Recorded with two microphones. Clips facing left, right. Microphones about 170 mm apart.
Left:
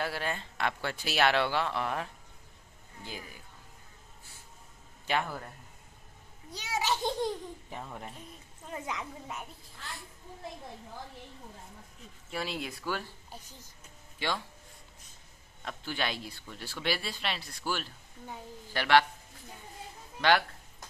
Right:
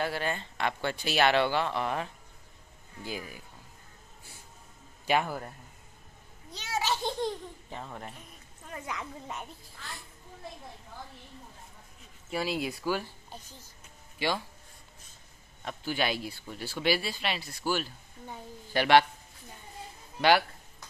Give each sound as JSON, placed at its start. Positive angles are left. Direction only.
{"t": 0.0, "sound": "speech", "side_deg": 0}
{"t": 3.0, "sound": "speech", "side_deg": -10}
{"t": 5.0, "sound": "a man's voice", "side_deg": -15}
{"t": 6.5, "sound": "baby laughter", "side_deg": 15}
{"t": 8.7, "sound": "a woman's voice", "side_deg": 20}
{"t": 12.3, "sound": "speech", "side_deg": -5}
{"t": 14.1, "sound": "speech", "side_deg": -5}
{"t": 15.6, "sound": "speech", "side_deg": -5}
{"t": 18.7, "sound": "speech", "side_deg": -15}
{"t": 20.2, "sound": "speech", "side_deg": -10}